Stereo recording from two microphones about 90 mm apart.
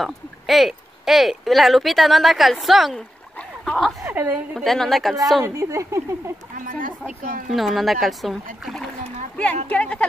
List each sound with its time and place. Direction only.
0.0 s speech: centre (ahead or behind)
4.0 s a woman's voice: 25° right (ahead or behind)
4.6 s speech: 5° left (ahead or behind)
5.4 s speech: 30° right (ahead or behind)
7.1 s speech: centre (ahead or behind)
9.4 s a woman's voice: 15° left (ahead or behind)